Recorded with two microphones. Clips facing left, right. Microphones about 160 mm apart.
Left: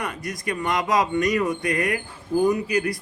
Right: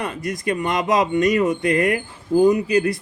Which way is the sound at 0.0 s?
25° right (ahead or behind).